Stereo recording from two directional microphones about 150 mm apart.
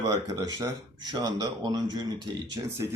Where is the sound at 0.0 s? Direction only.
25° right (ahead or behind).